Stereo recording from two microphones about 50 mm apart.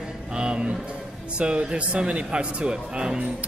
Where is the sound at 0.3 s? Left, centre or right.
Centre.